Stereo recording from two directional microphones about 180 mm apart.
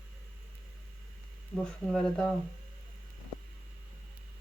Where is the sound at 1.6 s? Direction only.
5° left (ahead or behind).